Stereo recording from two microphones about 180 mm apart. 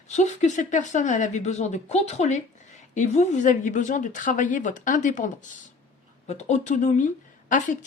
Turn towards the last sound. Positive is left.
turn(degrees=45)  # may be behind; listen again after turning